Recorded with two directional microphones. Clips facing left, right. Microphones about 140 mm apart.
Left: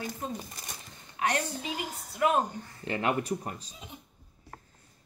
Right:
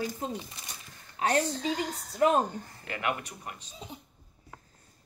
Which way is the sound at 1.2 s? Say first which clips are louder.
Right 3 dB; 35° right (ahead or behind).